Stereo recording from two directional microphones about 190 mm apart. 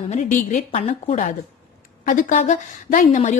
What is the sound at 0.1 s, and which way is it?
A woman's voice, 40° left (ahead or behind).